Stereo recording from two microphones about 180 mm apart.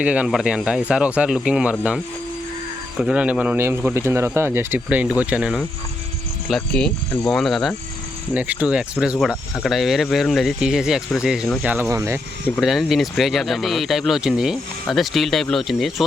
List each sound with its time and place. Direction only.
0.0 s speech: 5° right (ahead or behind)
3.0 s speech: 5° right (ahead or behind)
12.5 s speech: centre (ahead or behind)